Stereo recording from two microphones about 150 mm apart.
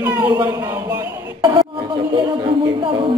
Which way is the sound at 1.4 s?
30° right (ahead or behind).